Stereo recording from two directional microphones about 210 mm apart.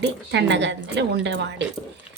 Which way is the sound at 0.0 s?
55° right (ahead or behind).